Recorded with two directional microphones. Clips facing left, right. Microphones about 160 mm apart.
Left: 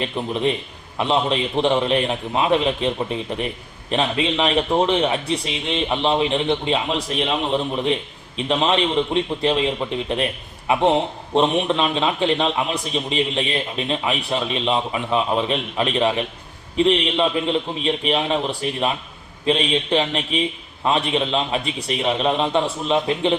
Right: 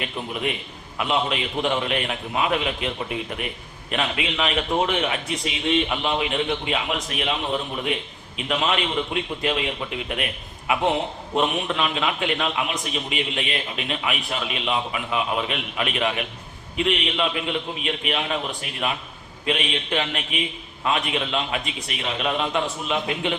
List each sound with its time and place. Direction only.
0.0 s a man's voice: 30° left (ahead or behind)
8.4 s a man's voice: 30° left (ahead or behind)